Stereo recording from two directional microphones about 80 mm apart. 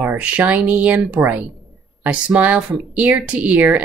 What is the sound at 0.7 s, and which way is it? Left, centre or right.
Speech, centre.